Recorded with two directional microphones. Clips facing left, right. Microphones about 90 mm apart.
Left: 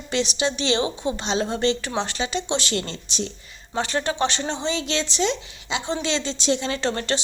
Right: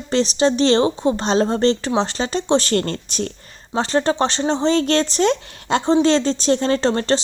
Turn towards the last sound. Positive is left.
turn(degrees=-35)  # may be behind; listen again after turning